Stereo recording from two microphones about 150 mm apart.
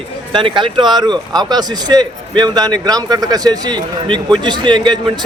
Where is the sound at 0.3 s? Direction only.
35° right (ahead or behind).